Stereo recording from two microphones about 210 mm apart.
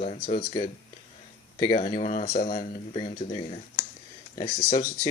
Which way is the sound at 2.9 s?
20° left (ahead or behind).